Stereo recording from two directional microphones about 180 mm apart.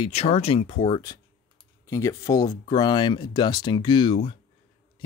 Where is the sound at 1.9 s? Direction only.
15° left (ahead or behind).